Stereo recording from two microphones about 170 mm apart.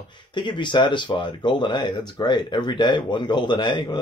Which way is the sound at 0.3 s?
25° left (ahead or behind).